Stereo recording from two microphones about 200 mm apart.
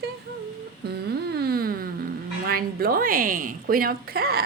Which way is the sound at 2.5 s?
50° right (ahead or behind).